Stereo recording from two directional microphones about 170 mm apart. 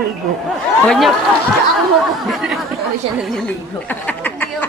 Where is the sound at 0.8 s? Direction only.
5° left (ahead or behind).